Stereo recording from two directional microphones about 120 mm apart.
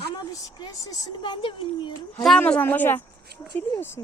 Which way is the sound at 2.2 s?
10° left (ahead or behind).